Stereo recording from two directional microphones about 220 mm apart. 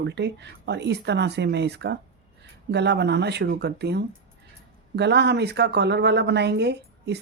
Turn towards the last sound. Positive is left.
turn(degrees=-50)  # may be behind; listen again after turning